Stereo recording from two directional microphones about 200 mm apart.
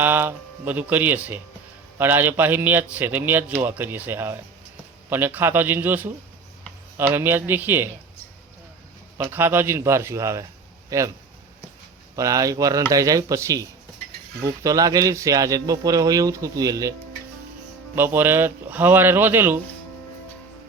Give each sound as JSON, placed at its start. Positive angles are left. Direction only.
{"t": 0.0, "sound": "a man's voice", "side_deg": -10}
{"t": 9.1, "sound": "a man's voice", "side_deg": -10}
{"t": 12.1, "sound": "a man's voice", "side_deg": -15}
{"t": 17.9, "sound": "a man's voice", "side_deg": -10}